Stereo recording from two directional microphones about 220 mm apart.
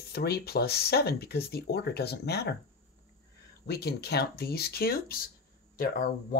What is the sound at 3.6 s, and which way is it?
Speech, 45° left (ahead or behind).